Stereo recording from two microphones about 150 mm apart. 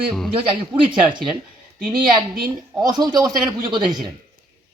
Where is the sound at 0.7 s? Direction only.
30° right (ahead or behind).